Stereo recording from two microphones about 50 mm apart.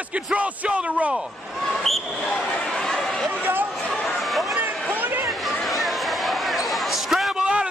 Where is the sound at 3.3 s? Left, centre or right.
Right.